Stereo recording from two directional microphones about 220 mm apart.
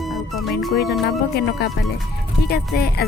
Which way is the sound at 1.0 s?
45° left (ahead or behind).